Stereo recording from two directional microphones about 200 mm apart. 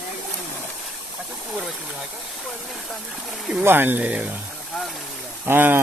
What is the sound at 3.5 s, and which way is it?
Speech, 10° right (ahead or behind).